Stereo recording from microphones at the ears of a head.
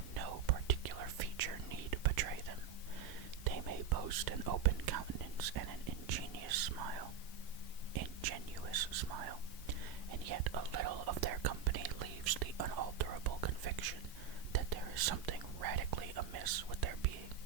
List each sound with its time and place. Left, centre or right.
0.1 s whispering: right